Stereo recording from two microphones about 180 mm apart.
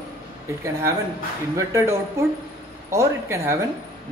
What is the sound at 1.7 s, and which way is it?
Speech, 15° right (ahead or behind).